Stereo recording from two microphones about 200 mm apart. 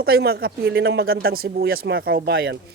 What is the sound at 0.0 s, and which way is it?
A man's voice, 50° right (ahead or behind).